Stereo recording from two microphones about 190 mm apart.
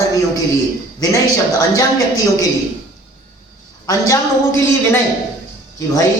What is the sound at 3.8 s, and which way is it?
A woman's voice, 15° left (ahead or behind).